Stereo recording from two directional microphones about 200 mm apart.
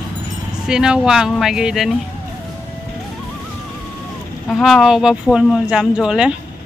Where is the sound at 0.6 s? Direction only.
5° right (ahead or behind).